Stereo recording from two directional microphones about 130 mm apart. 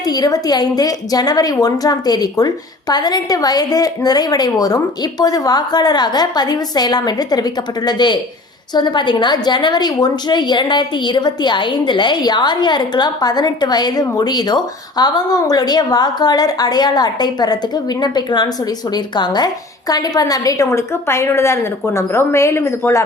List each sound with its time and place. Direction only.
0.0 s a woman's voice: 30° left (ahead or behind)